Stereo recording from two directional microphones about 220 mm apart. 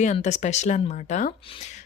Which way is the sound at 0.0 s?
30° left (ahead or behind).